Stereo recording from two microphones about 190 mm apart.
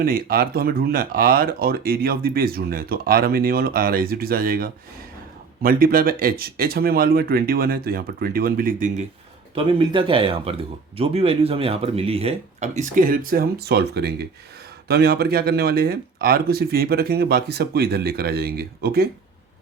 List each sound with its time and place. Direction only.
0.0 s speech: 50° right (ahead or behind)
9.6 s speech: 25° right (ahead or behind); by 19.0 s 55° right (ahead or behind)